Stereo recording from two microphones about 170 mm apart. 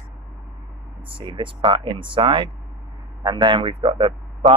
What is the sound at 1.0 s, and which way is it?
Speech, 30° right (ahead or behind).